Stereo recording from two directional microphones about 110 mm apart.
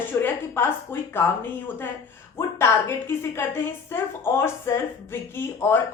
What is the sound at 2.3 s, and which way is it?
A woman's voice, 25° left (ahead or behind).